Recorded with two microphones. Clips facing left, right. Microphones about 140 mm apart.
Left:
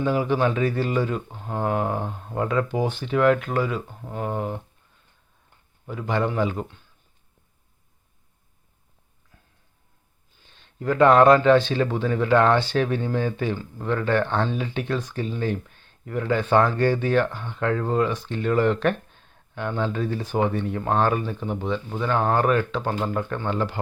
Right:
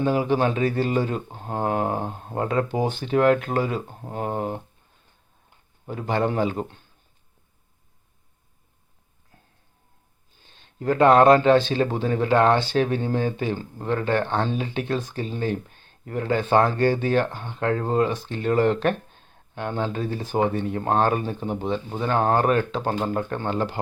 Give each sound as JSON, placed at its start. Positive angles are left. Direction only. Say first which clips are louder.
{"t": 0.0, "sound": "speech", "louder": "right 1 dB", "side_deg": -30}
{"t": 5.8, "sound": "speech", "louder": "right 1 dB", "side_deg": -35}
{"t": 10.4, "sound": "speech", "louder": "right 1 dB", "side_deg": -30}